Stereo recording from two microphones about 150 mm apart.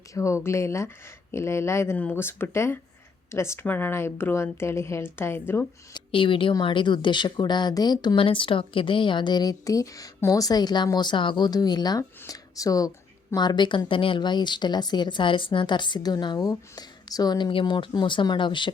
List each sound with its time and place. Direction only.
0.1 s speech: 20° left (ahead or behind)
5.9 s a woman's voice: 35° left (ahead or behind)